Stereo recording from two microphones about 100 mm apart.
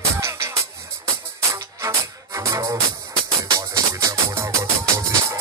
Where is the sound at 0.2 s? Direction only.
30° right (ahead or behind).